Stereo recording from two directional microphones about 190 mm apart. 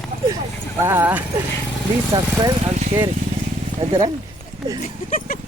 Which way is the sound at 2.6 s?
35° right (ahead or behind).